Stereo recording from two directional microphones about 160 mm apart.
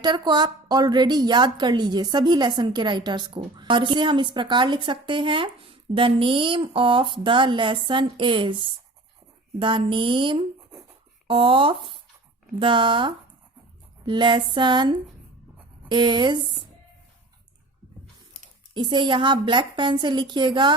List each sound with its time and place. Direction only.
0.0 s a woman's voice: 25° right (ahead or behind)
18.7 s a woman's voice: 30° right (ahead or behind)